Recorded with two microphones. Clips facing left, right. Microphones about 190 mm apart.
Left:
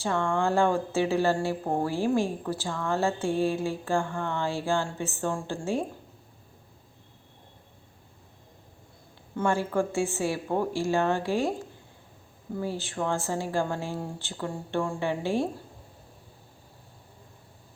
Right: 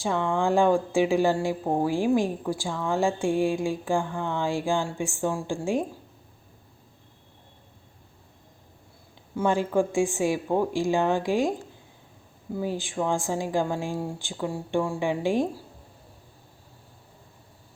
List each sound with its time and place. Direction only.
0.0 s speech: 15° right (ahead or behind)
9.3 s speech: 15° right (ahead or behind)
12.5 s speech: 15° right (ahead or behind)